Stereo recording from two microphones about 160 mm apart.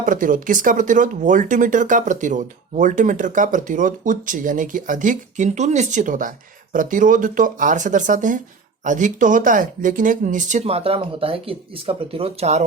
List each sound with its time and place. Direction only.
0.0 s speech: 55° right (ahead or behind)